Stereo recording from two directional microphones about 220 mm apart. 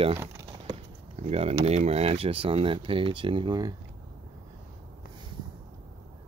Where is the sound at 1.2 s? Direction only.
30° right (ahead or behind).